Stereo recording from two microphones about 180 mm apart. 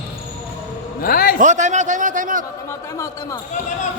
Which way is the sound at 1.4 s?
40° right (ahead or behind).